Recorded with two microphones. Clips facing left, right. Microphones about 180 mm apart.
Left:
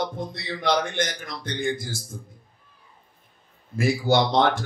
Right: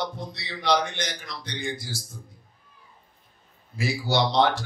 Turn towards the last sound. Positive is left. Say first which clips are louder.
# left 1 dB
turn(degrees=50)  # may be behind; listen again after turning